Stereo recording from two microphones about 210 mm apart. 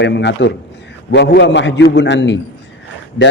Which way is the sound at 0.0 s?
55° left (ahead or behind).